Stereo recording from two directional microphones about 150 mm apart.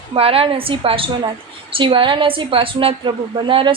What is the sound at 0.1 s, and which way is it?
A woman's voice, 40° right (ahead or behind).